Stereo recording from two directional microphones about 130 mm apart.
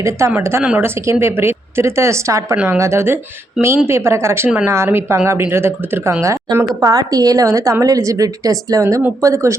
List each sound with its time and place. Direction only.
0.0 s speech: 20° right (ahead or behind)